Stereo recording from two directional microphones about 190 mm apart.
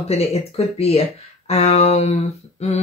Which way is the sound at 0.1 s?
35° left (ahead or behind).